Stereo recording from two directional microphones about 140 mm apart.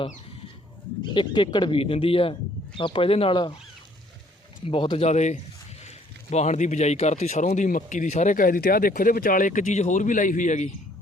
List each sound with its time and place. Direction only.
1.1 s speech: 35° left (ahead or behind)
4.6 s a man's voice: 40° left (ahead or behind); by 10.7 s 65° left (ahead or behind)